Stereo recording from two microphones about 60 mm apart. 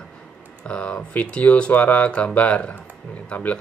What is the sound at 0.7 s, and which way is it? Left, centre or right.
Speech, centre.